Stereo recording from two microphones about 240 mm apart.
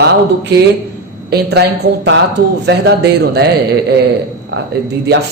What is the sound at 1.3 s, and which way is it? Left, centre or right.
Speech, right.